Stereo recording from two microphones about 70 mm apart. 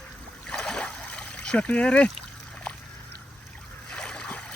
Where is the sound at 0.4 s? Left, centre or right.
Centre.